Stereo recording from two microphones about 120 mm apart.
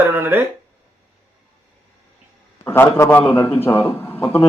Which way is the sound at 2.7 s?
20° left (ahead or behind).